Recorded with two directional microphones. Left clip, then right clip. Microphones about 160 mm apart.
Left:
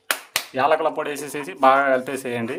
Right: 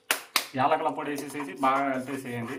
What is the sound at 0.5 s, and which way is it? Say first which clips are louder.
Speech: left 7 dB; 85° left.